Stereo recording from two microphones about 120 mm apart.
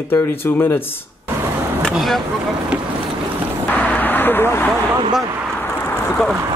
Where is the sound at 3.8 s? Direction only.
15° left (ahead or behind).